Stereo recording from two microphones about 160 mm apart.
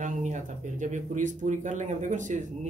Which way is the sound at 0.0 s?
50° right (ahead or behind).